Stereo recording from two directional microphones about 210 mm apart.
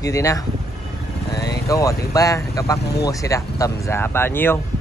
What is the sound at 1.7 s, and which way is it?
Speech, 15° left (ahead or behind).